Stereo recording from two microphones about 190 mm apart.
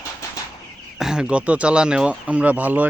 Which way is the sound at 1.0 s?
5° right (ahead or behind).